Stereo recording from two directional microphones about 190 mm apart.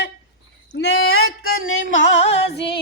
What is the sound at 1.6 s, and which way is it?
Speech, 90° left.